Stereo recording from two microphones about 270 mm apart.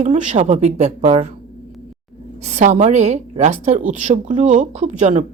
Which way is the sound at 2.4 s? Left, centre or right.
Right.